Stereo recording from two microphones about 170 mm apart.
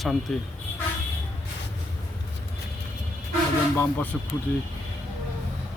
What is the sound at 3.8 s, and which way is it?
Speech, 10° left (ahead or behind).